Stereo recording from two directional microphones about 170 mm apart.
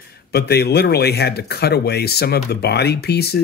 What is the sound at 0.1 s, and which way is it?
Speech, 70° left (ahead or behind).